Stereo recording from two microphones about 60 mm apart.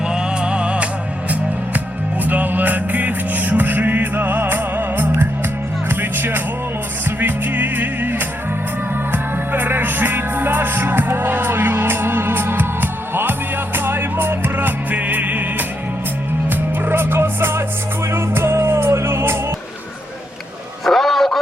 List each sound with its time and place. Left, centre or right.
0.1 s music: centre
2.2 s music: right
20.8 s a sound: centre